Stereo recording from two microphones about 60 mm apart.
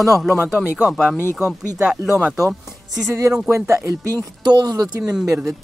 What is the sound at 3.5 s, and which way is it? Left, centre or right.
Speech, right.